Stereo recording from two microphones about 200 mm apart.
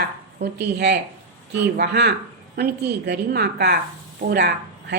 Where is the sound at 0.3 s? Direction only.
55° right (ahead or behind).